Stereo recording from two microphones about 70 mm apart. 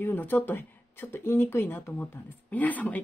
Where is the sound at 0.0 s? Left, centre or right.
Left.